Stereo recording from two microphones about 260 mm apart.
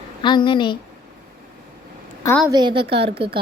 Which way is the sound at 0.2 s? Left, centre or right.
Centre.